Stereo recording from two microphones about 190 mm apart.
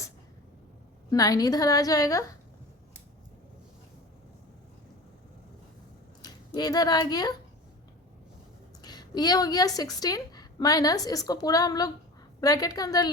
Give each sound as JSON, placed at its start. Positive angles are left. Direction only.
{"t": 1.1, "sound": "a woman's voice", "side_deg": 20}
{"t": 6.2, "sound": "speech", "side_deg": 20}
{"t": 8.8, "sound": "a woman's voice", "side_deg": 20}